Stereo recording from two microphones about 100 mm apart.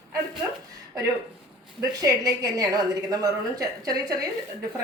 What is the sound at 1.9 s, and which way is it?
A woman's voice, 35° right (ahead or behind).